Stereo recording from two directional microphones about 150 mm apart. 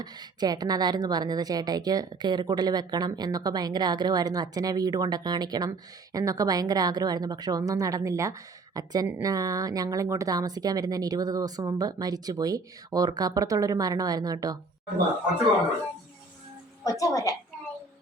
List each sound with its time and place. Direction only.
0.0 s a woman's voice: 25° right (ahead or behind)
16.8 s a woman's voice: 20° left (ahead or behind)